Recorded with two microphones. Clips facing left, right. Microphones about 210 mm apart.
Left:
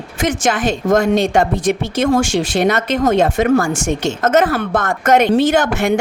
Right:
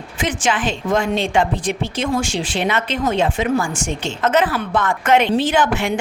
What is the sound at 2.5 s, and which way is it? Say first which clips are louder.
Speech: left 4 dB; 40° left (ahead or behind).